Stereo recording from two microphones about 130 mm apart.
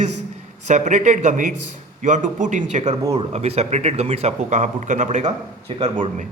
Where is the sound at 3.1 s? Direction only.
55° right (ahead or behind).